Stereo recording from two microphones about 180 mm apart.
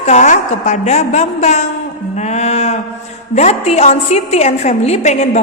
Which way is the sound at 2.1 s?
40° left (ahead or behind).